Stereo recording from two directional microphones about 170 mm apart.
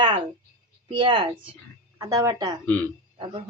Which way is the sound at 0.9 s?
30° right (ahead or behind).